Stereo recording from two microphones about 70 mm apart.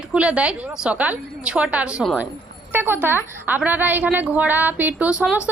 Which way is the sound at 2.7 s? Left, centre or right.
Right.